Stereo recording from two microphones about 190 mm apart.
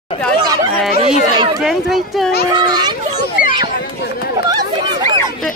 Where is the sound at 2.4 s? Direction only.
20° right (ahead or behind).